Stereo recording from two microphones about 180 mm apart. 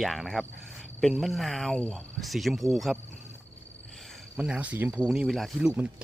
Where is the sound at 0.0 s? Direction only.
Centre (ahead or behind).